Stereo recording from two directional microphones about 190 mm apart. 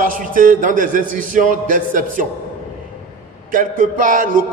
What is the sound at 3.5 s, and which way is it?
Speech, 45° right (ahead or behind).